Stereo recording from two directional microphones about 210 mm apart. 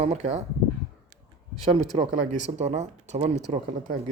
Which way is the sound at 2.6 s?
30° right (ahead or behind).